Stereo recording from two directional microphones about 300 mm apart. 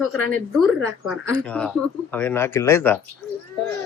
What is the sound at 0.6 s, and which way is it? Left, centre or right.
Speech, centre.